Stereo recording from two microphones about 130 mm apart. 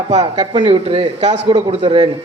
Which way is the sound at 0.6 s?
45° right (ahead or behind).